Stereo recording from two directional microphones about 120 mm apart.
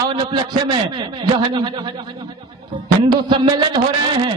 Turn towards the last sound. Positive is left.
turn(degrees=-40)  # may be behind; listen again after turning